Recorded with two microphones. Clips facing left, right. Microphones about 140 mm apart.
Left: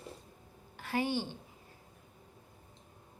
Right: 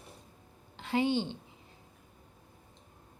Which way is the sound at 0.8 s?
20° right (ahead or behind).